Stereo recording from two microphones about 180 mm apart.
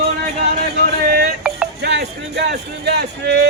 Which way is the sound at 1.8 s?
65° right (ahead or behind).